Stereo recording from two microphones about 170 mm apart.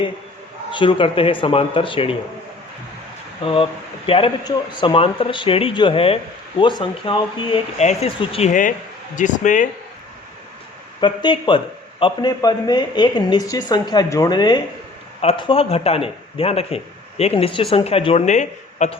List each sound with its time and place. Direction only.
0.7 s speech: 30° left (ahead or behind)
3.4 s speech: 30° left (ahead or behind); by 9.6 s 50° left (ahead or behind)
11.0 s speech: 30° left (ahead or behind); by 18.9 s 45° left (ahead or behind)